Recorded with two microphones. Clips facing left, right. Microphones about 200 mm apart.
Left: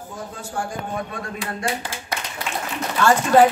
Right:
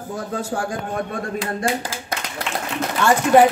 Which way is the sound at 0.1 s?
90° right.